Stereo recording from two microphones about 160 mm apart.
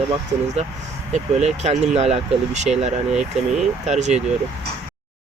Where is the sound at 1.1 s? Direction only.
45° right (ahead or behind).